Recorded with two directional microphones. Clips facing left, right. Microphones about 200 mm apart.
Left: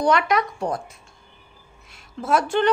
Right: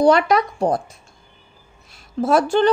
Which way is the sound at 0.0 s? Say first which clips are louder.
Right 5 dB; 35° right (ahead or behind).